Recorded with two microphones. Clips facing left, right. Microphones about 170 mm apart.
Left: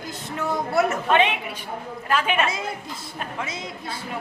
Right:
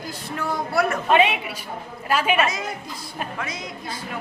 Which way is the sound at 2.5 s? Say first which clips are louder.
Even; 25° left (ahead or behind).